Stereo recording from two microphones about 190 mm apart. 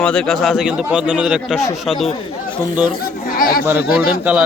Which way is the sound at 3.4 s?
50° left (ahead or behind).